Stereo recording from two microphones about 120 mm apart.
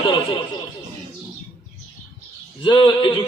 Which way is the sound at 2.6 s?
40° left (ahead or behind).